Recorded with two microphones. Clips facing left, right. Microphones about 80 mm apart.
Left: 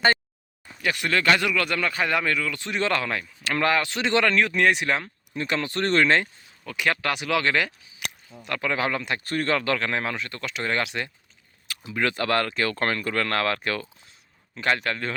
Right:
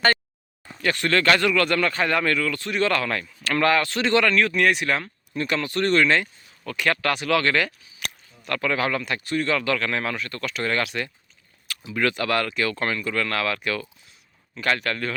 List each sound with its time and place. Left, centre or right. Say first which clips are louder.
0.8 s speech: right 3 dB; centre; by 6.2 s left
6.7 s speech: right 2 dB; centre
9.2 s speech: right 1 dB; left
14.5 s speech: even; left